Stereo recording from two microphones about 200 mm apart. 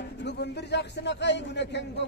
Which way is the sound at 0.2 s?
60° left (ahead or behind).